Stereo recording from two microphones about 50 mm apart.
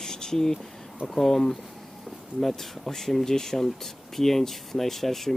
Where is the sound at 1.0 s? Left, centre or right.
Centre.